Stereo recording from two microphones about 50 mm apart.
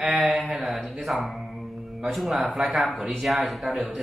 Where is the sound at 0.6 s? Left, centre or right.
Centre.